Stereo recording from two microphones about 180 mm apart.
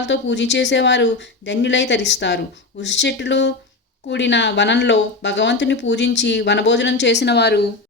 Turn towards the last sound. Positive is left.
turn(degrees=65)  # may be behind; listen again after turning